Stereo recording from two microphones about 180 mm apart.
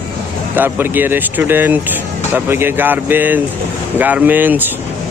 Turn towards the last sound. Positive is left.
turn(degrees=-10)  # may be behind; listen again after turning